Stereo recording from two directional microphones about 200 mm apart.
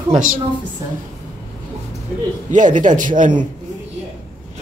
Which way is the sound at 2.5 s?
40° right (ahead or behind).